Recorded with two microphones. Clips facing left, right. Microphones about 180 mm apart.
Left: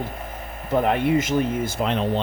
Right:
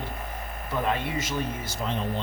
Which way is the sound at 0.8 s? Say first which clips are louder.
Left 8 dB; 55° left (ahead or behind).